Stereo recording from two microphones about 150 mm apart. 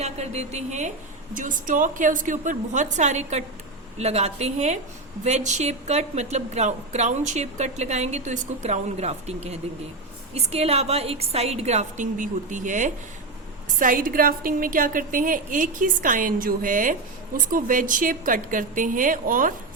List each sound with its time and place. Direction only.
0.0 s a woman's voice: 45° right (ahead or behind); by 19.5 s 65° right (ahead or behind)